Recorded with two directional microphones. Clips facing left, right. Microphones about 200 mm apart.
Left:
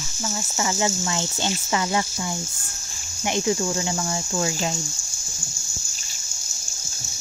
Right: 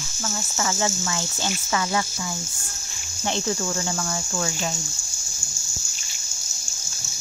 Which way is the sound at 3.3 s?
15° left (ahead or behind).